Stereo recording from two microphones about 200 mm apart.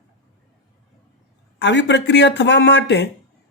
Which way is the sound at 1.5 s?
60° left (ahead or behind).